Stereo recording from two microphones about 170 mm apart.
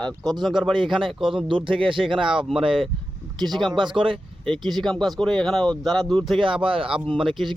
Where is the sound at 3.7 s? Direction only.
25° right (ahead or behind).